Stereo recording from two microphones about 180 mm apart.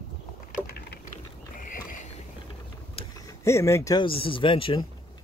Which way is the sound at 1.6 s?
50° left (ahead or behind).